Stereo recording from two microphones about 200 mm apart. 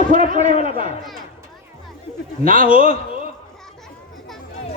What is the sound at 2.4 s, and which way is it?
Speech, 45° right (ahead or behind).